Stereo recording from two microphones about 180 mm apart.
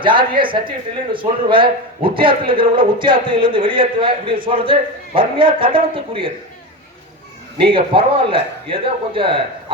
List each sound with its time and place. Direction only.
0.0 s a man's voice: 25° right (ahead or behind)
7.6 s a man's voice: 30° right (ahead or behind)